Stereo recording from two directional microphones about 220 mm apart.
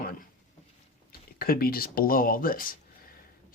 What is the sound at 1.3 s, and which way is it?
Speech, 40° left (ahead or behind).